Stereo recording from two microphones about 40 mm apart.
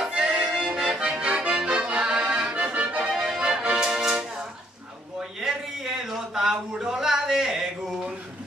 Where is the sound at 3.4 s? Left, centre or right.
Right.